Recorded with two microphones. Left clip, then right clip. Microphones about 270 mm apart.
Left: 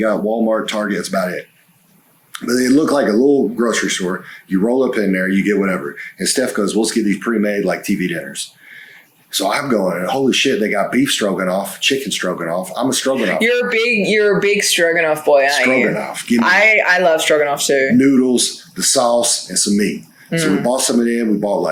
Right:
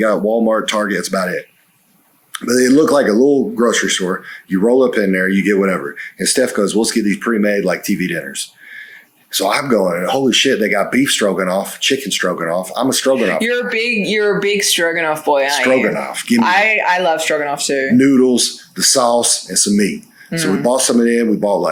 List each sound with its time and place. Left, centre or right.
0.0 s speech: right
13.4 s speech: left
15.6 s speech: right
16.4 s speech: left
17.9 s speech: right